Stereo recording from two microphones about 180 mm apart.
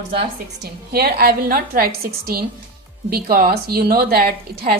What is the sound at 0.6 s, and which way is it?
A woman's voice, 60° right (ahead or behind).